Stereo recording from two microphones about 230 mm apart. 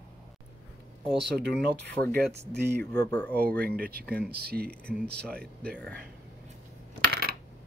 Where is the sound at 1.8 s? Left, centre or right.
Right.